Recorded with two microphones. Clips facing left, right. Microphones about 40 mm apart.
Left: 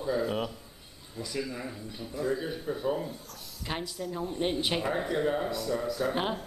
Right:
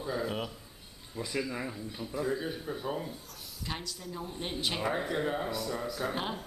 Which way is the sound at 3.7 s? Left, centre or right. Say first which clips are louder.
Left 5 dB; centre.